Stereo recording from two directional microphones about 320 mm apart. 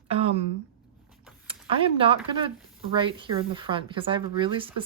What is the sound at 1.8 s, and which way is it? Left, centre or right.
Speech, centre.